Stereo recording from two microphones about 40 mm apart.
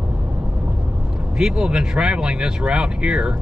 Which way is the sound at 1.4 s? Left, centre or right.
Centre.